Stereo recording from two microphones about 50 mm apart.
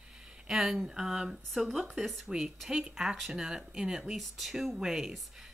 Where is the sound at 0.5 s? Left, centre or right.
Centre.